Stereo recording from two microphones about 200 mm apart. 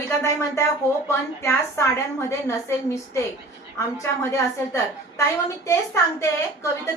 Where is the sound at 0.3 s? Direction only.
15° left (ahead or behind).